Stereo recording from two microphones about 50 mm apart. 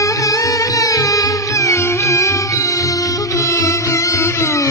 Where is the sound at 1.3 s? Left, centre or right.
Left.